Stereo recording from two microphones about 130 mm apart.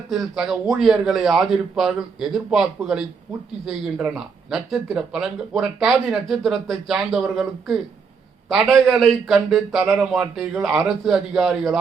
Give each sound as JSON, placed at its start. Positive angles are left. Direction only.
{"t": 0.1, "sound": "speech", "side_deg": -5}